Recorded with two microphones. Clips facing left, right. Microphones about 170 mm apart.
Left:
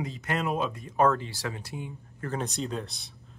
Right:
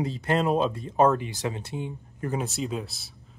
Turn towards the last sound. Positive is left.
turn(degrees=-5)  # may be behind; listen again after turning